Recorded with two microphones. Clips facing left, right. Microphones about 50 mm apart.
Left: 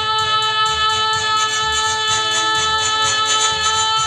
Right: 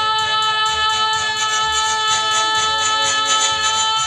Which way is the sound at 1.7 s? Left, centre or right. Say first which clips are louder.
Even; centre.